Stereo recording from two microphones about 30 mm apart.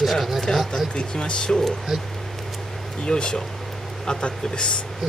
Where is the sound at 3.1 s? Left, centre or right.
Left.